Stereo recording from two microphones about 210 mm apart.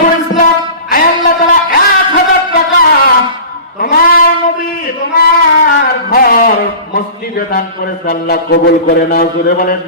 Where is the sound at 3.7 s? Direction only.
45° left (ahead or behind).